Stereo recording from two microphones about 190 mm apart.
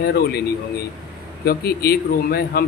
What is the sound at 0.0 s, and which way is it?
Speech, 55° left (ahead or behind).